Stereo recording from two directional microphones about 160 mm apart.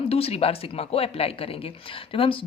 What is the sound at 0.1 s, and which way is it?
Speech, 35° left (ahead or behind).